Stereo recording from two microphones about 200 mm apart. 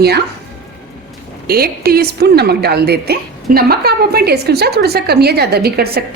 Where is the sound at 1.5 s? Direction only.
50° right (ahead or behind).